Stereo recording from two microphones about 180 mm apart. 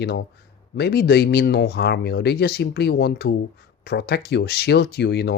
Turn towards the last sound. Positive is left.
turn(degrees=65)  # may be behind; listen again after turning